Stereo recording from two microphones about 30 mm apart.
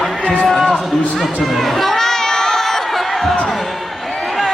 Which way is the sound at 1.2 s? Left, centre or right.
Centre.